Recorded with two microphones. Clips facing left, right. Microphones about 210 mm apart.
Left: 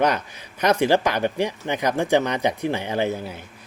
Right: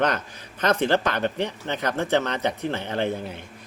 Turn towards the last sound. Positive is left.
turn(degrees=5)  # may be behind; listen again after turning